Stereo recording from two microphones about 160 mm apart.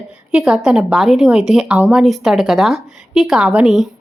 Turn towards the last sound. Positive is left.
turn(degrees=0)  # may be behind; listen again after turning